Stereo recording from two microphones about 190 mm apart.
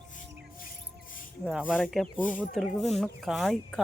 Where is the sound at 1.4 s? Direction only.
5° right (ahead or behind).